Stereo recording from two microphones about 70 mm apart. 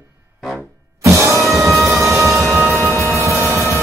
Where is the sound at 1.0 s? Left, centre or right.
Right.